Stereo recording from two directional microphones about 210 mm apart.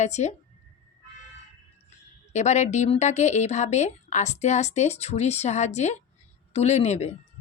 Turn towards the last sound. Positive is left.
turn(degrees=30)  # may be behind; listen again after turning